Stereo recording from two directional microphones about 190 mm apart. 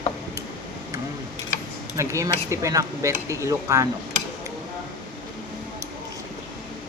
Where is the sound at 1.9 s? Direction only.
15° right (ahead or behind).